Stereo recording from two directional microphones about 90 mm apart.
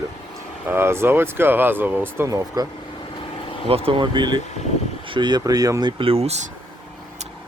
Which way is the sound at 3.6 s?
90° right.